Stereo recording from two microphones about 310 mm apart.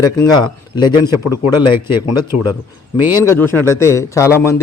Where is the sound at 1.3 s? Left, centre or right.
Left.